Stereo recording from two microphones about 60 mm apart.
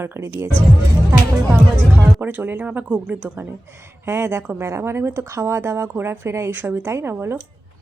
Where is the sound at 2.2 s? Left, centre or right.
Right.